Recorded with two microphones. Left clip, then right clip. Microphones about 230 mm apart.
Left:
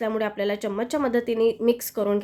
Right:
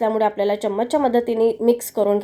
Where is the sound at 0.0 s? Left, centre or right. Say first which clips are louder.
Right 7 dB; centre.